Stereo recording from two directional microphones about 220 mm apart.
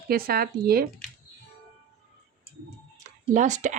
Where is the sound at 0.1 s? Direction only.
40° right (ahead or behind).